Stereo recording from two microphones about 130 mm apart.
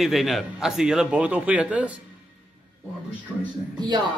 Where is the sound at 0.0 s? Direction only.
Centre (ahead or behind).